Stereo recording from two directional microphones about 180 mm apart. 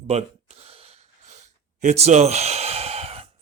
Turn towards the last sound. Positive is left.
turn(degrees=-35)  # may be behind; listen again after turning